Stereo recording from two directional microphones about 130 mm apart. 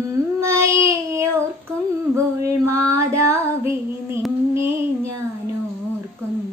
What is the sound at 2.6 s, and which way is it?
Child singing, 20° right (ahead or behind).